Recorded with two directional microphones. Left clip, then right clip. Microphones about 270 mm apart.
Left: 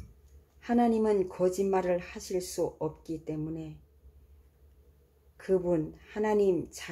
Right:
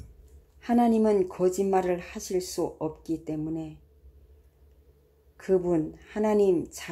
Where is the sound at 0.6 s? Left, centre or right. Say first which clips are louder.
Right 3 dB; centre.